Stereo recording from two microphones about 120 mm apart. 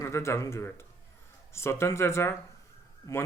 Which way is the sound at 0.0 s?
25° left (ahead or behind).